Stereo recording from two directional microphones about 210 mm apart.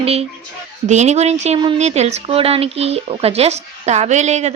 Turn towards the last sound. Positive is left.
turn(degrees=-30)  # may be behind; listen again after turning